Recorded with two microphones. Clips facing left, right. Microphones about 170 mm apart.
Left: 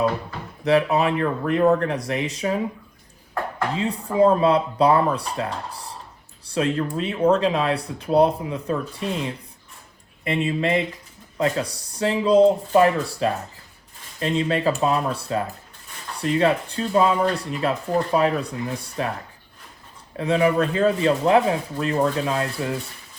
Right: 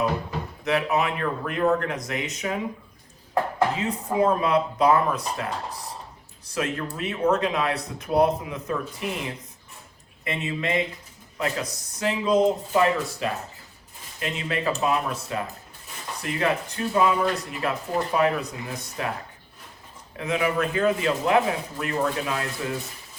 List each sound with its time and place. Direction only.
0.6 s speech: 35° left (ahead or behind)
3.8 s speech: 30° left (ahead or behind)
20.1 s speech: 35° left (ahead or behind)